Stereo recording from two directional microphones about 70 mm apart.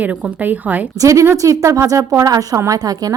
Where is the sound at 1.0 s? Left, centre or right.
Right.